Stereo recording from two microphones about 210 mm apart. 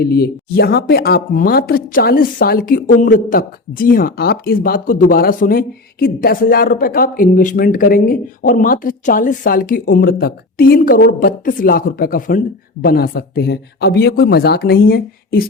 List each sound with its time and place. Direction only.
0.0 s speech: 45° left (ahead or behind)